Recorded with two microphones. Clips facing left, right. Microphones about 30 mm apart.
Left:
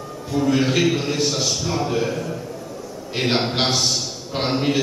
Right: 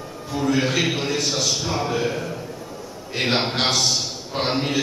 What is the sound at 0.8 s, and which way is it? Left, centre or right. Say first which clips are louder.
Speech: left 3 dB; centre.